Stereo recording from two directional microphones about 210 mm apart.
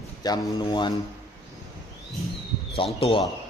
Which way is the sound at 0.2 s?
20° left (ahead or behind).